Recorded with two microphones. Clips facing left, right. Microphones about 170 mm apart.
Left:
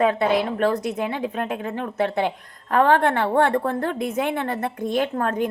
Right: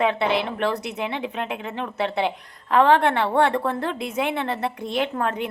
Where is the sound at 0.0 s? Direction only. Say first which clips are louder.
Left 2 dB; 40° left (ahead or behind).